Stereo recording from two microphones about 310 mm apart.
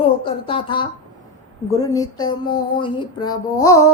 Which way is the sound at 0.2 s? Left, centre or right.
Centre.